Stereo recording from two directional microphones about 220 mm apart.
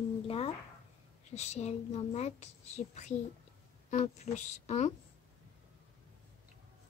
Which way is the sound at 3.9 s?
35° left (ahead or behind).